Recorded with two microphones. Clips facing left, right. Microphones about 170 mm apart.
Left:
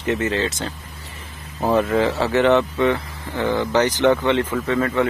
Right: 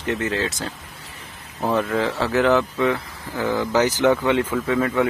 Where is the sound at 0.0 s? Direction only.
Centre (ahead or behind).